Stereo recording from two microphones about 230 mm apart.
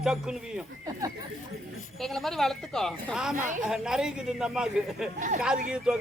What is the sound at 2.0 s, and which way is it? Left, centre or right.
A man's voice, centre.